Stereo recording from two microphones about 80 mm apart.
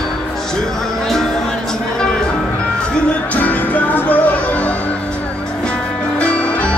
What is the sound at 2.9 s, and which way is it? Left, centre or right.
Music, centre.